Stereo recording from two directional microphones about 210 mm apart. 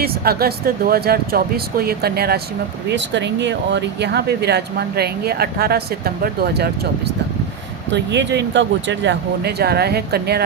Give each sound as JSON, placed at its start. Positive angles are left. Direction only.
{"t": 0.0, "sound": "speech", "side_deg": -45}
{"t": 7.9, "sound": "speech", "side_deg": -55}